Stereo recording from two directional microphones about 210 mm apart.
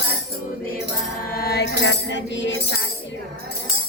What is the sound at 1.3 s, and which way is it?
Music, 50° left (ahead or behind).